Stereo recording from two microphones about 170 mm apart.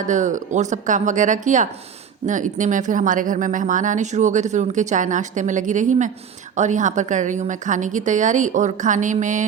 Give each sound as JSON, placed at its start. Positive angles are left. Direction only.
{"t": 0.1, "sound": "speech", "side_deg": -50}